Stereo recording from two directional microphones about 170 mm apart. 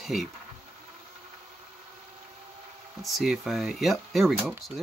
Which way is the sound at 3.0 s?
Centre (ahead or behind).